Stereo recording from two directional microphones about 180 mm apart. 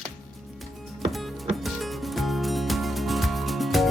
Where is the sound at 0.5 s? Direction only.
Centre (ahead or behind).